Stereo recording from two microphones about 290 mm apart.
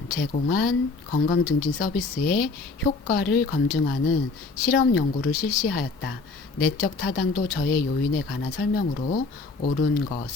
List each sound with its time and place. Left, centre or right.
0.1 s speech: left